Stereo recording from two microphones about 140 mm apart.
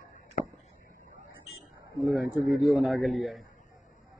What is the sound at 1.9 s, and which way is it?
Speech, 25° right (ahead or behind).